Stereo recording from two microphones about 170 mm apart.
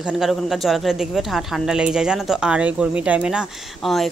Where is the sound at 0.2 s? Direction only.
Centre (ahead or behind).